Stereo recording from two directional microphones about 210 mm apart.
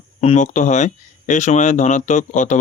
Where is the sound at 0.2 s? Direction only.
30° left (ahead or behind).